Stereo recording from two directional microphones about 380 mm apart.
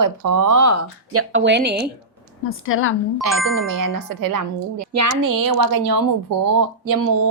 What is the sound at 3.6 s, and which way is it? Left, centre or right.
Speech, right.